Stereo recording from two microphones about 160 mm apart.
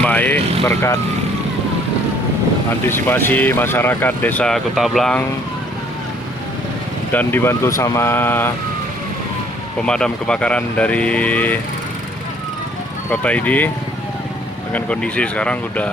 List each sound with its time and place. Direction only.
0.0 s vehicle: 10° left (ahead or behind)
0.6 s speech: 20° left (ahead or behind)
2.9 s speech: 15° left (ahead or behind)
7.1 s speech: 10° left (ahead or behind)
9.8 s speech: 5° left (ahead or behind)
13.1 s speech: 10° left (ahead or behind)
14.7 s speech: 10° left (ahead or behind)